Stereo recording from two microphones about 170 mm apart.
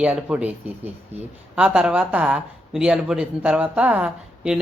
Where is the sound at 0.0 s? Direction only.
10° right (ahead or behind).